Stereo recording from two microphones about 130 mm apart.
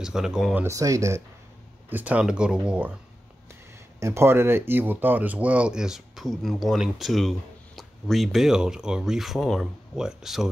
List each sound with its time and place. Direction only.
0.0 s speech: 5° right (ahead or behind)
0.6 s speech: 25° right (ahead or behind)
1.9 s speech: 10° right (ahead or behind)
4.0 s speech: 20° right (ahead or behind); by 10.5 s 5° right (ahead or behind)